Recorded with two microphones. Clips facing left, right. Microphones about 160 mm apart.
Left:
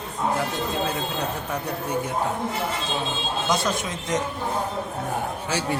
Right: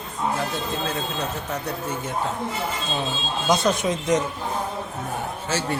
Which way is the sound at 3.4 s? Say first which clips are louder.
Right 4 dB; 20° right (ahead or behind).